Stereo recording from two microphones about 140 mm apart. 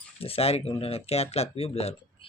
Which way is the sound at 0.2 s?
45° left (ahead or behind).